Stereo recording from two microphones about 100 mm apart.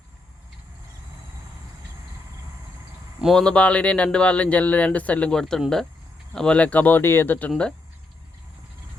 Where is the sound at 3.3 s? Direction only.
10° left (ahead or behind).